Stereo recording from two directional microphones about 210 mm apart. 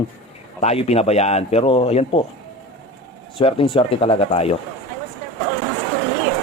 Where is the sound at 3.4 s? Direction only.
25° left (ahead or behind).